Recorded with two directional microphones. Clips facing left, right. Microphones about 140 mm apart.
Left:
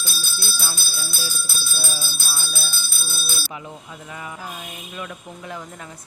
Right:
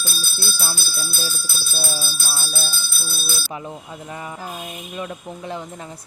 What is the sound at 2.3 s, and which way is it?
Bell, 35° right (ahead or behind).